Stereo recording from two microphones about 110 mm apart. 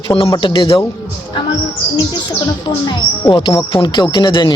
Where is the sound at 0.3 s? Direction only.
45° left (ahead or behind).